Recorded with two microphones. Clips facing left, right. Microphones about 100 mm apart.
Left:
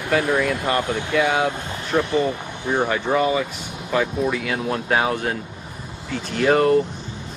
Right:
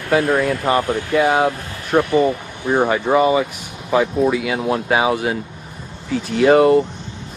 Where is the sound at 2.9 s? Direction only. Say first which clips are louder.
Right 5 dB; 15° right (ahead or behind).